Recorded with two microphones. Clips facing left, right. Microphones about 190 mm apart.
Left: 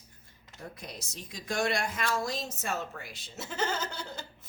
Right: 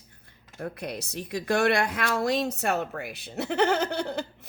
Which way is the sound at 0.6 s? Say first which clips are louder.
Right 10 dB; 65° right (ahead or behind).